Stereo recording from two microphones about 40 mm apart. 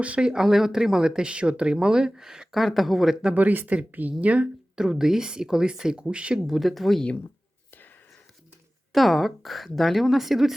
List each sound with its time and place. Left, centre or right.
0.2 s speech: right
0.4 s speech: centre
1.2 s speech: right
2.6 s a woman's voice: centre
3.3 s speech: right
4.8 s speech: centre
6.0 s speech: right
6.5 s a woman's voice: centre
8.9 s a woman's voice: centre